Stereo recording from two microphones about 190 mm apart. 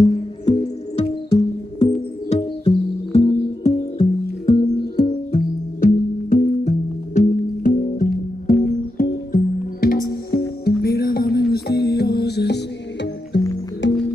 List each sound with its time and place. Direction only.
1.3 s music: 30° left (ahead or behind)
5.8 s music: 45° left (ahead or behind); by 14.0 s 70° left (ahead or behind)